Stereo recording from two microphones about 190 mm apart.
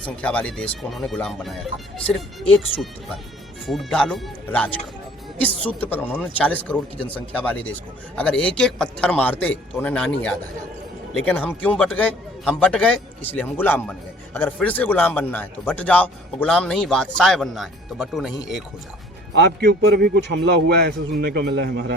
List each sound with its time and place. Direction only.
0.0 s a man's voice: 5° left (ahead or behind)
3.7 s a man's voice: centre (ahead or behind)
19.3 s a man's voice: 55° right (ahead or behind)